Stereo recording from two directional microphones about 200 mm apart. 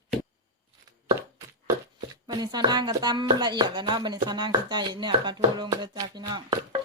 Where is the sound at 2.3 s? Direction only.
20° right (ahead or behind).